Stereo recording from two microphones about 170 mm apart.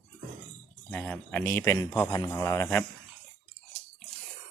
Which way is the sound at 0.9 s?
10° left (ahead or behind).